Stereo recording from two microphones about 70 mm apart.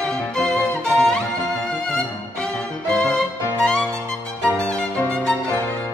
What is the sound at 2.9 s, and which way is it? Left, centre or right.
Music, centre.